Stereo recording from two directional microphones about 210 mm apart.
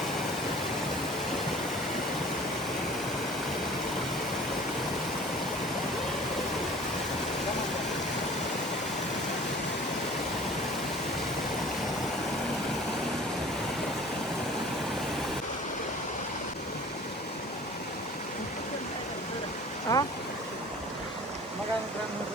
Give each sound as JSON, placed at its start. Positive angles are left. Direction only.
{"t": 19.9, "sound": "stream", "side_deg": 20}